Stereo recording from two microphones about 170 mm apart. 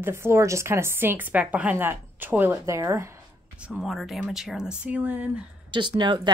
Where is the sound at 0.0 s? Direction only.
15° right (ahead or behind).